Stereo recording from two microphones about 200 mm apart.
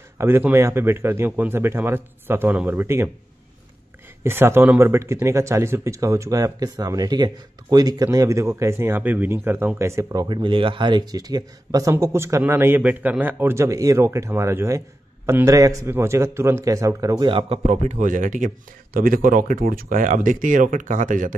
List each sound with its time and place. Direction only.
0.2 s speech: 10° right (ahead or behind)
4.2 s speech: 10° right (ahead or behind); by 21.4 s 40° right (ahead or behind)